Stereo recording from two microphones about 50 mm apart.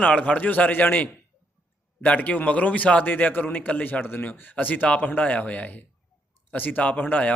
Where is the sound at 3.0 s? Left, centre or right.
Left.